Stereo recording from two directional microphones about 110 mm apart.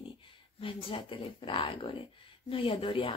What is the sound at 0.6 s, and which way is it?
Speech, 55° left (ahead or behind).